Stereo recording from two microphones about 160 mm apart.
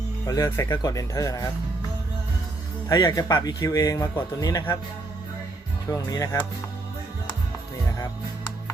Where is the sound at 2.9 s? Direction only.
25° left (ahead or behind).